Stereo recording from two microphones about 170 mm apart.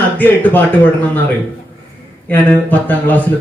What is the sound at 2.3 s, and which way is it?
Speech, 10° left (ahead or behind).